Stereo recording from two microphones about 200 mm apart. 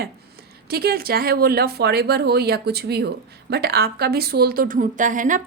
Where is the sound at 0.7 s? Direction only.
50° right (ahead or behind).